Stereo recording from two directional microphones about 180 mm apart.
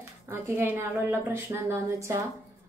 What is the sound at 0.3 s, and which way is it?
A woman's voice, 15° right (ahead or behind).